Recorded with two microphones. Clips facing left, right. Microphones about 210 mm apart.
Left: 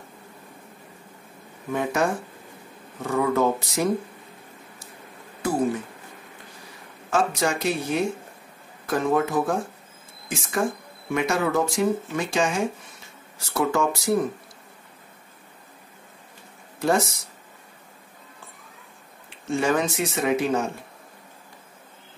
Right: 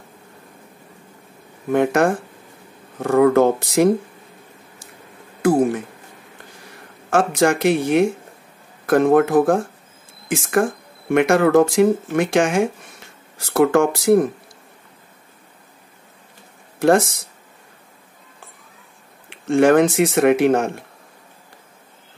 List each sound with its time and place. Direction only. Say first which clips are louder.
1.7 s speech: right 8 dB; 65° right (ahead or behind)
5.4 s speech: right 7 dB; 80° right
7.1 s speech: right 7 dB; 75° right (ahead or behind); by 9.6 s 50° right (ahead or behind)
10.2 s speech: right 7 dB; 70° right (ahead or behind)
13.5 s speech: right 8 dB; 80° right
16.8 s speech: right 7 dB; 75° right (ahead or behind)
19.2 s speech: right 9 dB; 70° right (ahead or behind)